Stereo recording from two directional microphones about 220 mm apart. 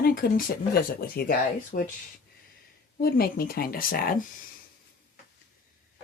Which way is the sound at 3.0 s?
45° left (ahead or behind).